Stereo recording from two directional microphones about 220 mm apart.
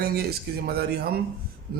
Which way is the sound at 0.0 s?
45° right (ahead or behind).